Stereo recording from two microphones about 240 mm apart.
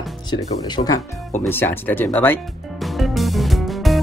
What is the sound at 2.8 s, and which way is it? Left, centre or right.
Music, centre.